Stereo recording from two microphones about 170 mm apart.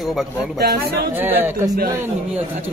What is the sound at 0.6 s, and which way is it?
Speech, 65° right (ahead or behind).